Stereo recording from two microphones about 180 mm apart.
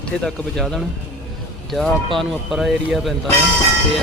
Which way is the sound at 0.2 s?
5° left (ahead or behind).